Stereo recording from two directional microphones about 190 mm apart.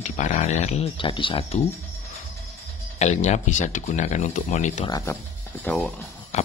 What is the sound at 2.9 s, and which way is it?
Speech, 35° left (ahead or behind).